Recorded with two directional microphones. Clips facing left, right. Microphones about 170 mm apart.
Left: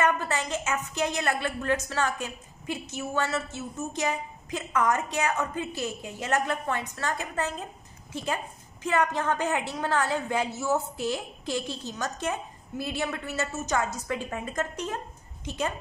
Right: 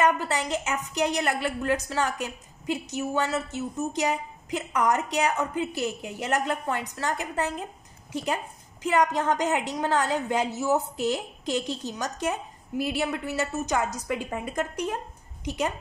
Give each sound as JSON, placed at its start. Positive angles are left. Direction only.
{"t": 0.0, "sound": "a woman's voice", "side_deg": -15}
{"t": 8.8, "sound": "a woman's voice", "side_deg": -15}